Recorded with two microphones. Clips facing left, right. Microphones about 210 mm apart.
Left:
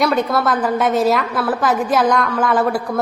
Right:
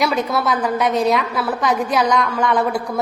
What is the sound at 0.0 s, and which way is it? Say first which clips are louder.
A woman's voice: left 2 dB; centre (ahead or behind).